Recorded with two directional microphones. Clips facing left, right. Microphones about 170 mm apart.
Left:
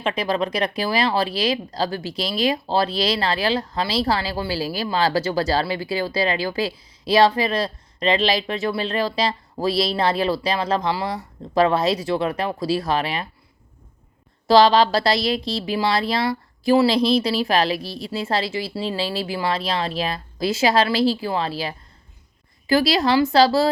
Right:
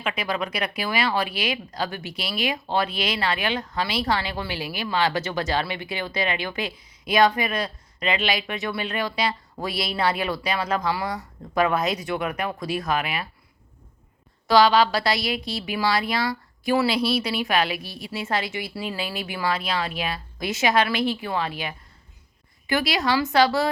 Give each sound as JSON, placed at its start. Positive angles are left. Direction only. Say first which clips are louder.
{"t": 0.0, "sound": "speech", "louder": "left 5 dB", "side_deg": 35}
{"t": 14.4, "sound": "speech", "louder": "left 3 dB", "side_deg": 35}